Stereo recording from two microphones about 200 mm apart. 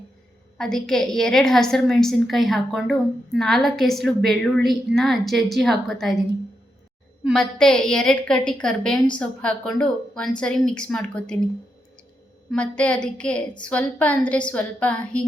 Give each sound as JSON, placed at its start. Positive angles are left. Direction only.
{"t": 0.6, "sound": "a woman's voice", "side_deg": 0}
{"t": 7.3, "sound": "a woman's voice", "side_deg": 5}
{"t": 12.5, "sound": "a woman's voice", "side_deg": 5}